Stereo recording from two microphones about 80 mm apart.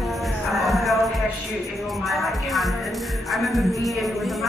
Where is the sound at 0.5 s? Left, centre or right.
Centre.